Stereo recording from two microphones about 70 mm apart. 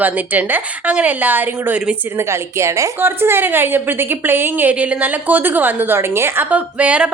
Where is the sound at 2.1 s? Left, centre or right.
Right.